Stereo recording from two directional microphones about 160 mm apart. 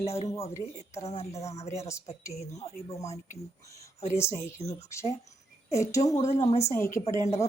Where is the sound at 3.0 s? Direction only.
45° left (ahead or behind).